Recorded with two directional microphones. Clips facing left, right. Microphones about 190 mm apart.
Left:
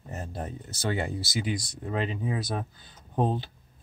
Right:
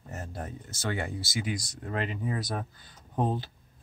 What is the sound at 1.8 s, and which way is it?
Speech, 20° left (ahead or behind).